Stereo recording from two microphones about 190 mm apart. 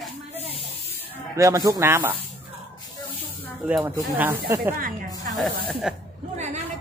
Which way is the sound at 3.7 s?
10° right (ahead or behind).